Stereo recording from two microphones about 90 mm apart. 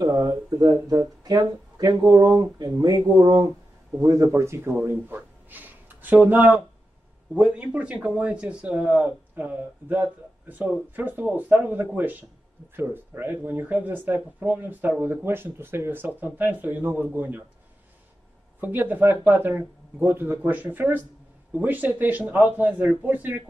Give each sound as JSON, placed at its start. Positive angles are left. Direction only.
{"t": 0.0, "sound": "speech", "side_deg": -45}
{"t": 4.0, "sound": "speech", "side_deg": -35}
{"t": 18.6, "sound": "speech", "side_deg": -20}